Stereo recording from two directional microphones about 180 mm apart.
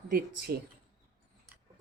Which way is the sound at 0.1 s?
55° right (ahead or behind).